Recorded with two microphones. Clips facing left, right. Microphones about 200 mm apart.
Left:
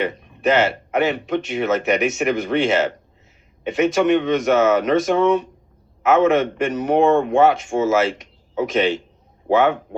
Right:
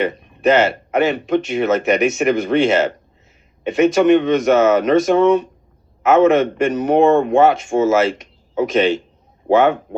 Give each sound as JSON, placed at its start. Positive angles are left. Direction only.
{"t": 0.0, "sound": "speech", "side_deg": -40}
{"t": 9.5, "sound": "speech", "side_deg": -45}